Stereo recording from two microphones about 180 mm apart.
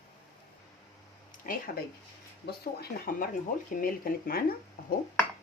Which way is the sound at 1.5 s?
50° left (ahead or behind).